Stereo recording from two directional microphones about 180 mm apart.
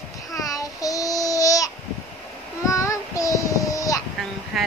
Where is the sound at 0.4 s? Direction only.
20° left (ahead or behind).